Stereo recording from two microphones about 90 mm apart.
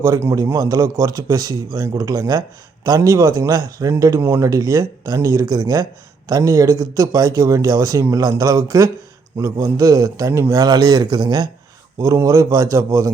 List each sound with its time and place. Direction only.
0.0 s a man's voice: 35° right (ahead or behind); by 11.4 s 50° right (ahead or behind)
11.9 s speech: 35° right (ahead or behind)